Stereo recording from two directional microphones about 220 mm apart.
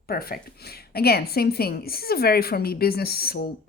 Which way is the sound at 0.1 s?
45° left (ahead or behind).